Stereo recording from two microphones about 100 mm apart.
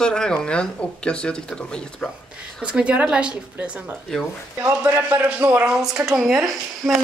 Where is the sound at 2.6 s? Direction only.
10° right (ahead or behind).